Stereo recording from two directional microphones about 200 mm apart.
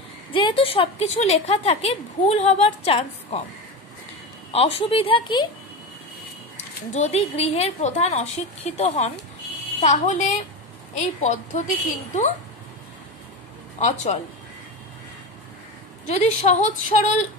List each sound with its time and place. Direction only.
0.3 s a woman's voice: 25° left (ahead or behind)
4.5 s a woman's voice: 30° left (ahead or behind)
6.5 s a woman's voice: 35° left (ahead or behind)
13.7 s a woman's voice: 35° left (ahead or behind)
16.1 s a woman's voice: 35° left (ahead or behind)